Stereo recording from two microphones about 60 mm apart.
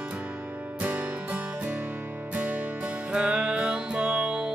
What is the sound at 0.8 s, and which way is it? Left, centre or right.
Music, right.